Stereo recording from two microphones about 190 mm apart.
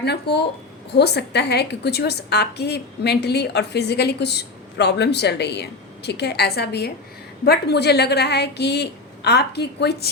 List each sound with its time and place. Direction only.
0.0 s a woman's voice: 60° left (ahead or behind)